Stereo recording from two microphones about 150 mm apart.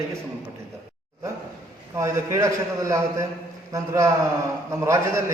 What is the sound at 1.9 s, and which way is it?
A man's voice, 20° right (ahead or behind).